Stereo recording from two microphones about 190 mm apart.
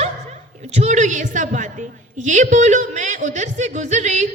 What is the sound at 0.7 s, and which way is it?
A woman's voice, 35° right (ahead or behind).